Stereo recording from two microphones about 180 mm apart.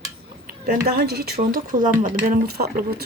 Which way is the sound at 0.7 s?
55° right (ahead or behind).